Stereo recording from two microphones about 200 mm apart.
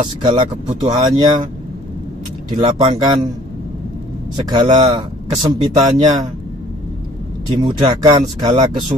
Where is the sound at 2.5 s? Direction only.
25° right (ahead or behind).